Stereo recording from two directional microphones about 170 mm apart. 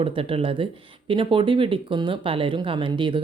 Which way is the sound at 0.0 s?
35° right (ahead or behind).